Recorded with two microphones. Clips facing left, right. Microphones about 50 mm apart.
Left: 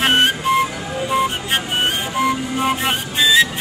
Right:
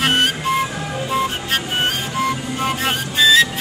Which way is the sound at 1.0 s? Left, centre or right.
Centre.